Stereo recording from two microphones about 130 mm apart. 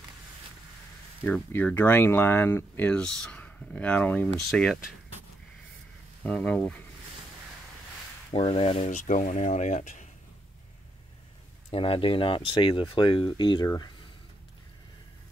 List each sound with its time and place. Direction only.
1.2 s speech: 15° left (ahead or behind)
6.2 s speech: 10° left (ahead or behind)
8.3 s speech: 45° left (ahead or behind)
8.9 s speech: 70° left (ahead or behind)
11.7 s speech: 45° left (ahead or behind)